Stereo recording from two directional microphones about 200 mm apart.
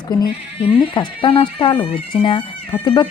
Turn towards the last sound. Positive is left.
turn(degrees=25)  # may be behind; listen again after turning